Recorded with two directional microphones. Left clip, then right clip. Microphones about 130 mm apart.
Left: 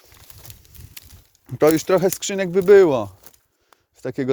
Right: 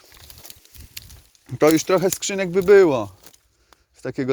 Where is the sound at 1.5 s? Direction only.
45° left (ahead or behind).